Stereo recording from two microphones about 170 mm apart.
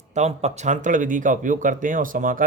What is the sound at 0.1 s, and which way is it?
Speech, 40° right (ahead or behind).